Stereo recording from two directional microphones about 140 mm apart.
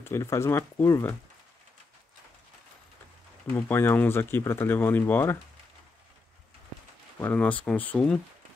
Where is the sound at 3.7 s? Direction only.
15° left (ahead or behind).